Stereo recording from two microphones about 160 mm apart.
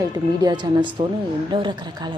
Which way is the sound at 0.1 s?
25° right (ahead or behind).